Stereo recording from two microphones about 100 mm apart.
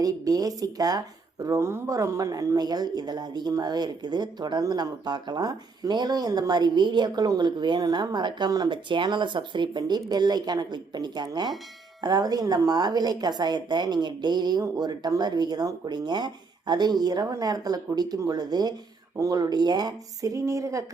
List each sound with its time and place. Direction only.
0.0 s a woman's voice: 35° right (ahead or behind)